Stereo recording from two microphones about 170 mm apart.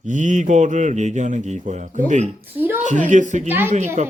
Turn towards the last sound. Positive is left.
turn(degrees=-45)  # may be behind; listen again after turning